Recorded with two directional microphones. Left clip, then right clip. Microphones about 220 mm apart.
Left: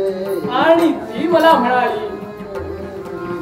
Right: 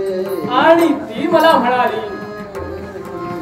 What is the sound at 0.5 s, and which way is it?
Speech, 15° right (ahead or behind).